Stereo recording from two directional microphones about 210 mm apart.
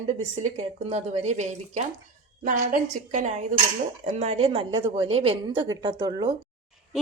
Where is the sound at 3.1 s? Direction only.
35° right (ahead or behind).